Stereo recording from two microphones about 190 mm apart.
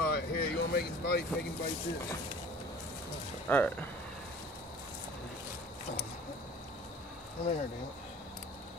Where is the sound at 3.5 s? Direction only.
10° left (ahead or behind).